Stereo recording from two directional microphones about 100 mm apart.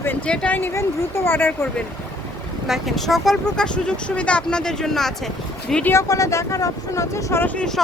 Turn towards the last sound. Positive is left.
turn(degrees=20)  # may be behind; listen again after turning